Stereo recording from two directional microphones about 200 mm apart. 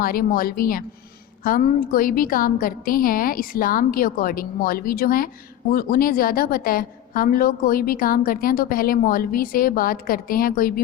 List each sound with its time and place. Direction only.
0.0 s a woman's voice: 45° left (ahead or behind)